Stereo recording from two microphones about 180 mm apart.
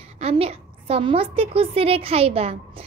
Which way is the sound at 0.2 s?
35° right (ahead or behind).